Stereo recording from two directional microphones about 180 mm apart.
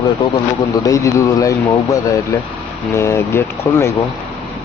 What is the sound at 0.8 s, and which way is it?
Speech, 15° left (ahead or behind).